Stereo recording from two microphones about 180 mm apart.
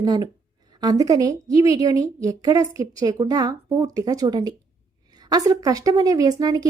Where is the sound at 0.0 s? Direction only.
20° right (ahead or behind).